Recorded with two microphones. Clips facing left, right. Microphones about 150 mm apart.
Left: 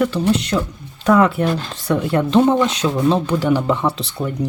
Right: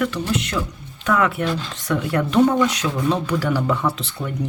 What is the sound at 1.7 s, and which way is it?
Speech, 30° left (ahead or behind).